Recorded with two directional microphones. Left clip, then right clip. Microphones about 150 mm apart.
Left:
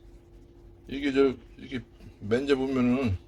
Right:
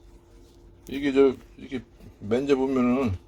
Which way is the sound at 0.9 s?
20° right (ahead or behind).